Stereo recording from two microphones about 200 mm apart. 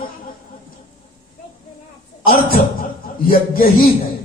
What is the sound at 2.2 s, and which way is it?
Chuckle, 45° left (ahead or behind).